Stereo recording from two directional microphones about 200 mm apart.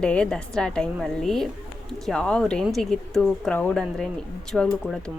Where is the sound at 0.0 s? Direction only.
5° left (ahead or behind).